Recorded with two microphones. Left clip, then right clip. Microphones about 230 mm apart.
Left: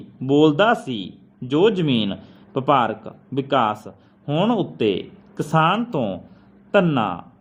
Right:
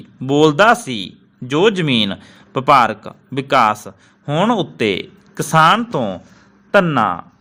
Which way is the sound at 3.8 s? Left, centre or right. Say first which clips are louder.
Right 4 dB; right.